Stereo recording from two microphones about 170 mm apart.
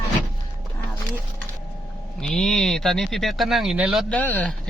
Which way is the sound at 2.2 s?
5° left (ahead or behind).